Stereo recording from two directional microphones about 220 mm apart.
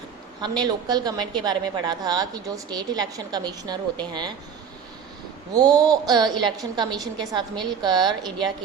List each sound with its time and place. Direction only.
0.4 s a woman's voice: 20° right (ahead or behind)
5.5 s a woman's voice: 15° right (ahead or behind)